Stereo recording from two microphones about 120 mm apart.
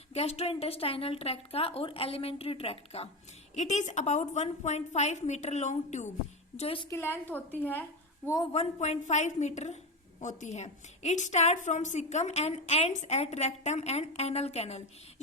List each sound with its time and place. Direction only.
0.1 s a woman's voice: 60° left (ahead or behind)
3.5 s a woman's voice: 75° left (ahead or behind)
6.6 s a woman's voice: 55° left (ahead or behind)
6.9 s a woman's voice: 20° left (ahead or behind)
8.5 s a woman's voice: 70° left (ahead or behind)
10.2 s a woman's voice: 85° left; by 14.8 s 60° left (ahead or behind)